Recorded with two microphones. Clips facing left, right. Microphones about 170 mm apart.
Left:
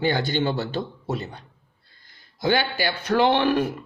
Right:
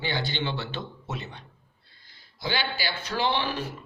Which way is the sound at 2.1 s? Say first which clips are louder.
Left 9 dB; 50° left (ahead or behind).